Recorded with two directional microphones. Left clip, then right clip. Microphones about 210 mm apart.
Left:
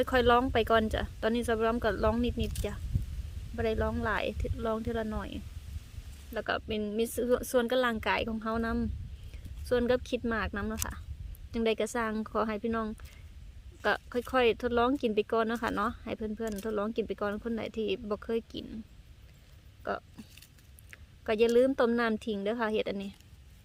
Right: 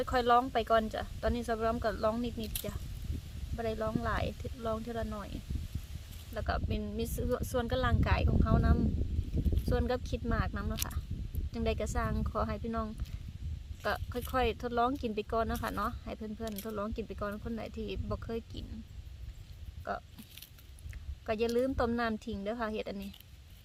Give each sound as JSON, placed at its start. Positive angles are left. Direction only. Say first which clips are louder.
{"t": 0.0, "sound": "speech", "louder": "left 3 dB", "side_deg": 35}
{"t": 6.3, "sound": "speech", "louder": "left 4 dB", "side_deg": 40}
{"t": 19.8, "sound": "speech", "louder": "left 3 dB", "side_deg": 40}